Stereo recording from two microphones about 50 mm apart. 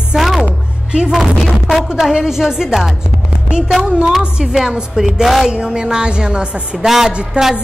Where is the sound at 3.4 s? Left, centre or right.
Centre.